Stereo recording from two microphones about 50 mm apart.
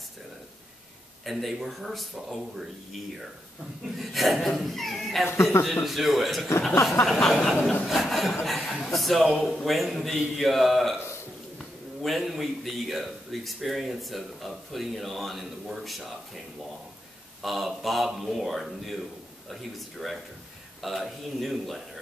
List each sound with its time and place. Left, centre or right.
1.2 s a man's voice: centre
4.0 s a man's voice: centre
5.3 s a man's voice: left
5.9 s a man's voice: centre
8.5 s chuckle: centre
8.8 s a man's voice: centre
12.0 s a man's voice: centre
17.4 s a man's voice: centre